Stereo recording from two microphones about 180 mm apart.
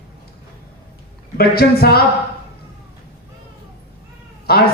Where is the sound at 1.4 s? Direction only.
60° left (ahead or behind).